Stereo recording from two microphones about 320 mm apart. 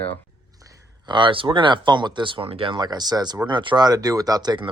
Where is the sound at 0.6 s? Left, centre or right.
Centre.